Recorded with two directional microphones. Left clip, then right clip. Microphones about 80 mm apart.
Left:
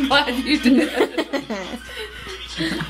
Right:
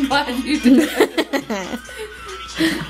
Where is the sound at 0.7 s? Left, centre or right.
Centre.